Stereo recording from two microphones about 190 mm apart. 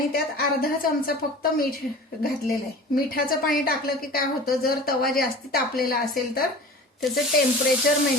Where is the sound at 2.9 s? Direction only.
50° left (ahead or behind).